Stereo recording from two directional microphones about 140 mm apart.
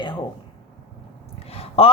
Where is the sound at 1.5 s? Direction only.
45° left (ahead or behind).